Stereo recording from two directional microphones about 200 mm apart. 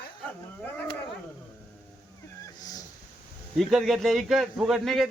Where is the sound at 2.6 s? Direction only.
20° left (ahead or behind).